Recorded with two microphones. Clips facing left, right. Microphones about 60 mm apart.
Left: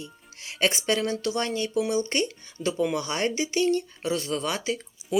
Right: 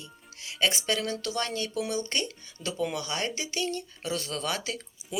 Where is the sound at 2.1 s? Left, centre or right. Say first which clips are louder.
Left 5 dB; left.